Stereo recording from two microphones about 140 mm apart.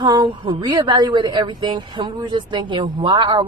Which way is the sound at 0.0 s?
30° right (ahead or behind).